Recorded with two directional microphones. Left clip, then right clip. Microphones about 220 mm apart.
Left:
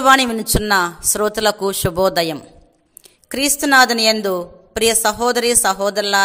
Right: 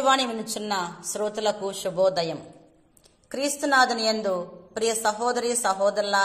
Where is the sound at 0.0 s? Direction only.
45° left (ahead or behind).